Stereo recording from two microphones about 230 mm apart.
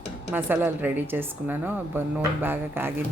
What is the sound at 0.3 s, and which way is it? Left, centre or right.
Speech, centre.